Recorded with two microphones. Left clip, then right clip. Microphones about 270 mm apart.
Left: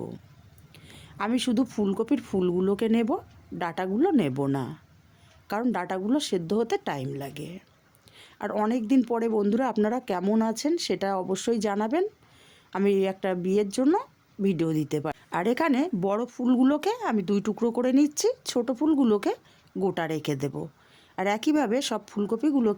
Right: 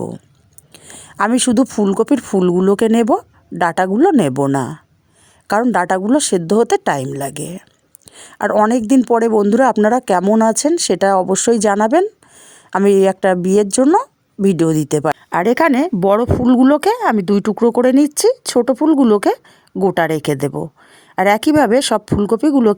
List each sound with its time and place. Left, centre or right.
0.7 s speech: right